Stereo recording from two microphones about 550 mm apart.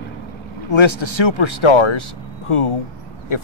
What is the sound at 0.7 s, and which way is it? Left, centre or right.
Speech, left.